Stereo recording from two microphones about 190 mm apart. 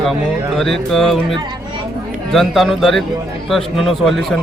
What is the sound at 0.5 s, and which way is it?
Speech, centre (ahead or behind).